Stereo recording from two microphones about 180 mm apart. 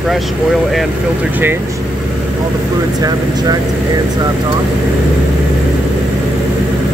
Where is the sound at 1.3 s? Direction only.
10° right (ahead or behind).